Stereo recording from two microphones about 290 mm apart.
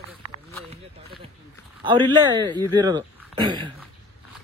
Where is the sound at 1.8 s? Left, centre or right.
Centre.